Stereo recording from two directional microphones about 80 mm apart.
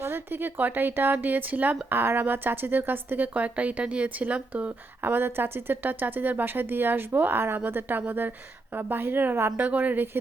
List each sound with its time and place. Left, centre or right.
0.0 s speech: right
5.0 s speech: right